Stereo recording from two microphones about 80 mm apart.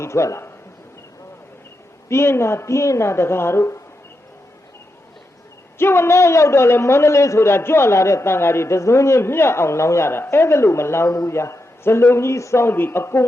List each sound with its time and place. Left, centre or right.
0.0 s a man's voice: left
2.0 s a man's voice: left
5.8 s a man's voice: left